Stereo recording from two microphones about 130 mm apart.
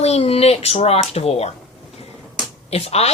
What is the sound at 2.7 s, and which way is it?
Speech, 50° left (ahead or behind).